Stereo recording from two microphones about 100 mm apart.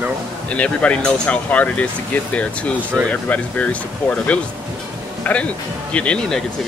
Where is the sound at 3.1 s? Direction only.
15° left (ahead or behind).